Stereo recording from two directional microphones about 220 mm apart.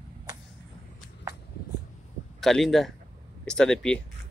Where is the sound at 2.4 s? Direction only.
Centre (ahead or behind).